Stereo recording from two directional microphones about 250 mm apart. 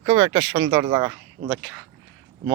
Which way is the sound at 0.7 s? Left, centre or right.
Centre.